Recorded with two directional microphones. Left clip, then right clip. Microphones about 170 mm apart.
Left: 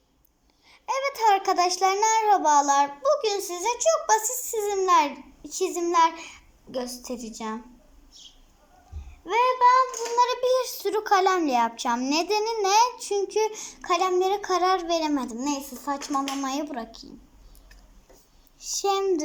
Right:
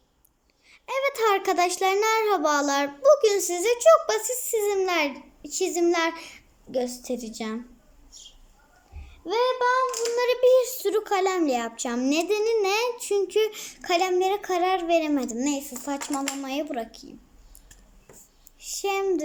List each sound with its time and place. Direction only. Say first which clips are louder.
0.7 s a child's voice: right 1 dB; 20° right (ahead or behind)
9.2 s a child's voice: left 3 dB; 25° right (ahead or behind)
18.6 s speech: left 2 dB; 15° right (ahead or behind)